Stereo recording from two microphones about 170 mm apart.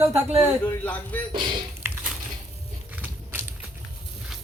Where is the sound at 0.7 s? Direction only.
10° left (ahead or behind).